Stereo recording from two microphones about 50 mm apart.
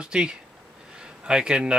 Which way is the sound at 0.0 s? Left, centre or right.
Centre.